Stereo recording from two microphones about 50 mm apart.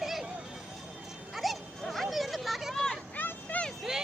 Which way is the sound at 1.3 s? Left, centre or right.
Centre.